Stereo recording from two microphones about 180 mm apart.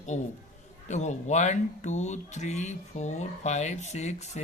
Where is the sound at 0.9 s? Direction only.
40° left (ahead or behind).